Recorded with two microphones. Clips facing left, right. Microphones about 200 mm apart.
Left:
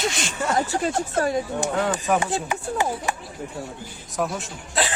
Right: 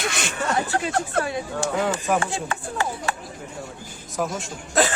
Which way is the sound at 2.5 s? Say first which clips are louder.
Left 3 dB; 15° left (ahead or behind).